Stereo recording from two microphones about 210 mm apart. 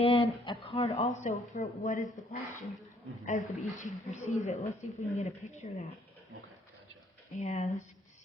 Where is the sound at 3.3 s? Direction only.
35° left (ahead or behind).